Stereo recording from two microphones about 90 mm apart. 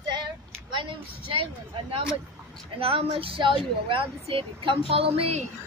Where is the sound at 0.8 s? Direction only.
70° right (ahead or behind).